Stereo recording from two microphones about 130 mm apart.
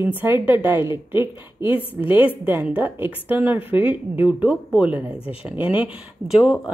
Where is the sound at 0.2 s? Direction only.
15° right (ahead or behind).